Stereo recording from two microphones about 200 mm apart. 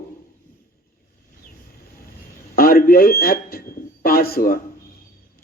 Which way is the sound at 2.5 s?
45° left (ahead or behind).